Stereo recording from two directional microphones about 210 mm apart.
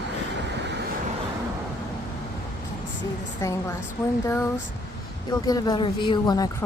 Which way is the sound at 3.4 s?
15° left (ahead or behind).